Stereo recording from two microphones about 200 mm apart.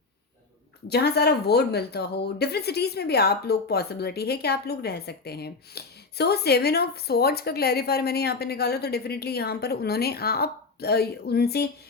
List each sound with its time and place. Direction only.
0.9 s a woman's voice: 55° left (ahead or behind)